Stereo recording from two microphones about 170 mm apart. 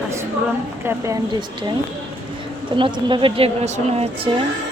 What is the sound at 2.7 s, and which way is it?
A woman's voice, 30° right (ahead or behind).